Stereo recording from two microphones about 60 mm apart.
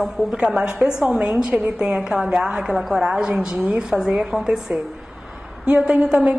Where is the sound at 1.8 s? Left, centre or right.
Centre.